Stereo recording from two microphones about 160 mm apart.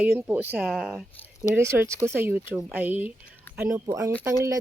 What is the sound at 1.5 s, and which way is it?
Speech, 15° right (ahead or behind).